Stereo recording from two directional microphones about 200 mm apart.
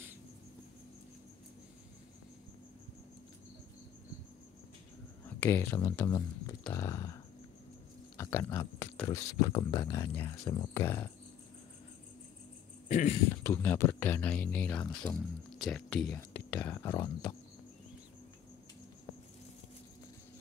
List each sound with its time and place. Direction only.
5.2 s speech: 10° left (ahead or behind)
8.2 s speech: 15° left (ahead or behind)
12.8 s speech: 35° left (ahead or behind)
13.3 s speech: 10° left (ahead or behind)